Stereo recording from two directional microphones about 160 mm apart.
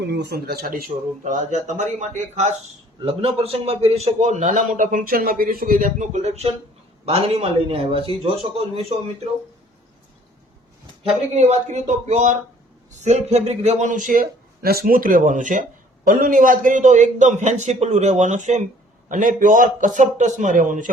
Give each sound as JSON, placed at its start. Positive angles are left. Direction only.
{"t": 0.0, "sound": "speech", "side_deg": -90}
{"t": 1.2, "sound": "a man's voice", "side_deg": -50}
{"t": 3.0, "sound": "a man's voice", "side_deg": -35}
{"t": 11.0, "sound": "a man's voice", "side_deg": -45}